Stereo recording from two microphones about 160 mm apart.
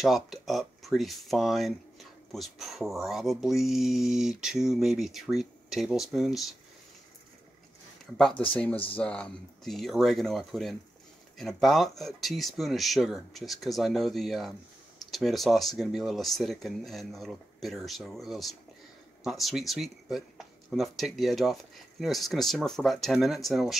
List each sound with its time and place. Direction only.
0.0 s speech: centre (ahead or behind)
8.5 s speech: 10° left (ahead or behind)